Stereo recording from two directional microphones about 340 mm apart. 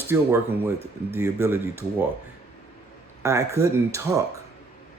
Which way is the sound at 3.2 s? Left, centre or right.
Centre.